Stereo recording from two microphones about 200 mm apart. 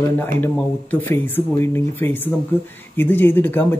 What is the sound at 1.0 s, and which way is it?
Speech, 10° left (ahead or behind).